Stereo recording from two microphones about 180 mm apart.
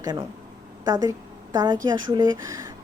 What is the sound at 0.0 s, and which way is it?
A woman's voice, 25° right (ahead or behind).